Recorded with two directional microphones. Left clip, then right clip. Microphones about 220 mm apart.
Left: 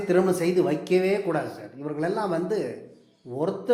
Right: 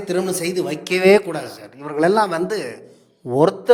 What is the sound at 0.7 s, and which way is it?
A man's voice, 40° right (ahead or behind).